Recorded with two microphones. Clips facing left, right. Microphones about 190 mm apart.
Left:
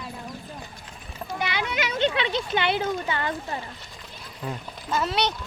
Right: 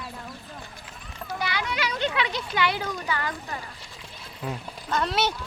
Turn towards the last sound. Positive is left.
turn(degrees=0)  # may be behind; listen again after turning